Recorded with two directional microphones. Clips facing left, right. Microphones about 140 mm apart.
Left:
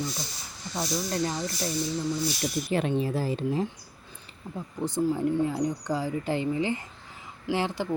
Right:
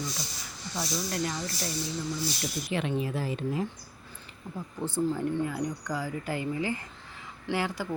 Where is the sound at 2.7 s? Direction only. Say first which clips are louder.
Left 3 dB; 40° left (ahead or behind).